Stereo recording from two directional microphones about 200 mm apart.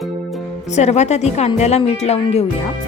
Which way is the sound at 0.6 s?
35° left (ahead or behind).